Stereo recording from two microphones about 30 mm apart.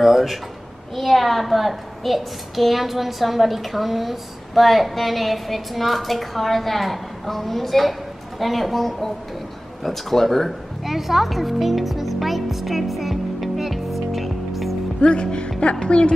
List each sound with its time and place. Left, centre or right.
0.9 s a child's voice: centre
10.8 s music: centre
15.0 s speech: left